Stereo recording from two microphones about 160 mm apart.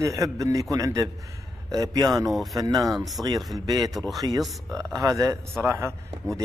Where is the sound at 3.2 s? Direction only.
Centre (ahead or behind).